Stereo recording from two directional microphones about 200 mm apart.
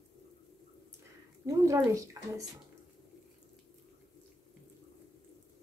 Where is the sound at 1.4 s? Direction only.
15° right (ahead or behind).